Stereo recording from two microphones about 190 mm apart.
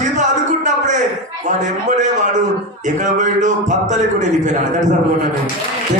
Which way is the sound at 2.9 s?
40° right (ahead or behind).